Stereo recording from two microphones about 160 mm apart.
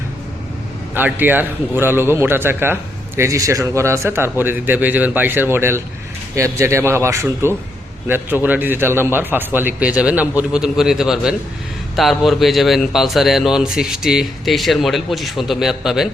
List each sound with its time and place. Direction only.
0.9 s a man's voice: 10° right (ahead or behind)